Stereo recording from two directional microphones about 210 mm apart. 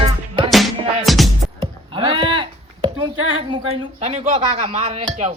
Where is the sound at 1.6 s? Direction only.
25° right (ahead or behind).